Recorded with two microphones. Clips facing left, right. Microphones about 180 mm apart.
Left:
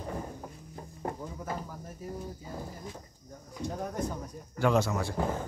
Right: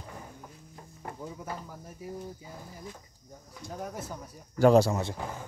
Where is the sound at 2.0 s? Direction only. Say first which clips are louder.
Even; 10° right (ahead or behind).